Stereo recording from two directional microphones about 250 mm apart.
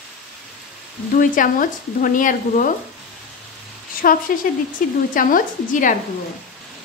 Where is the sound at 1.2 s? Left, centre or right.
Left.